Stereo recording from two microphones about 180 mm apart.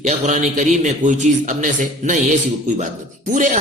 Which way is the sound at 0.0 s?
40° right (ahead or behind).